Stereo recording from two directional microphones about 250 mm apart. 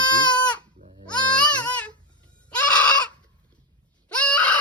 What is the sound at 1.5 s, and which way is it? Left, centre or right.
Baby cry, centre.